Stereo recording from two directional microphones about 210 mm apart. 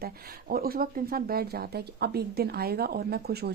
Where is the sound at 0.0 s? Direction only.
45° right (ahead or behind).